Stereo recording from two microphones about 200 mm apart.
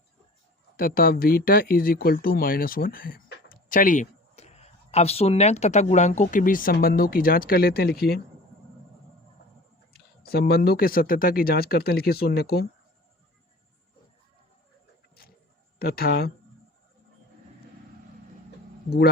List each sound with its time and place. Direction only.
0.8 s speech: 45° left (ahead or behind)
9.9 s speech: 50° left (ahead or behind)
15.8 s speech: 50° left (ahead or behind)